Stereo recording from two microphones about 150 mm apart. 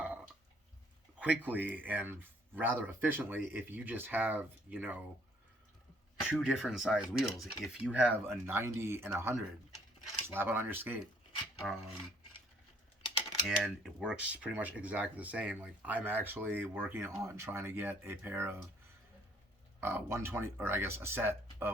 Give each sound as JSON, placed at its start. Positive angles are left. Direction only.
{"t": 1.2, "sound": "speech", "side_deg": -10}
{"t": 6.2, "sound": "speech", "side_deg": -5}
{"t": 11.6, "sound": "speech", "side_deg": 5}
{"t": 13.6, "sound": "speech", "side_deg": 0}
{"t": 19.8, "sound": "speech", "side_deg": -15}